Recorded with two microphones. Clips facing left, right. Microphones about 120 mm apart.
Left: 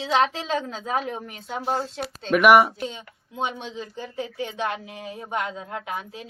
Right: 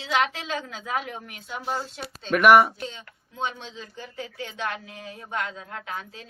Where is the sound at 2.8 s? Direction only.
25° left (ahead or behind).